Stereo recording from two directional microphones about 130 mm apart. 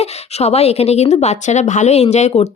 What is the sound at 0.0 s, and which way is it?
Speech, 55° left (ahead or behind).